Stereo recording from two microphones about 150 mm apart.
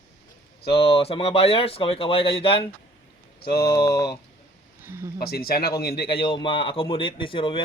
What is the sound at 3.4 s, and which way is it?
Speech, 90° left.